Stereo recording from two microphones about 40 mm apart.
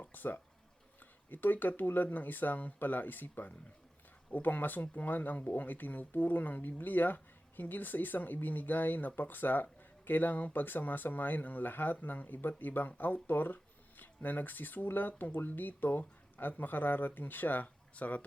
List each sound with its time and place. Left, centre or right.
0.0 s speech: left